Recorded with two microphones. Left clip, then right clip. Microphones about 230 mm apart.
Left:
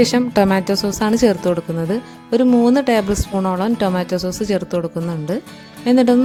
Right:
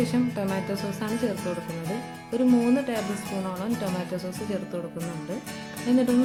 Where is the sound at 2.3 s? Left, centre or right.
Left.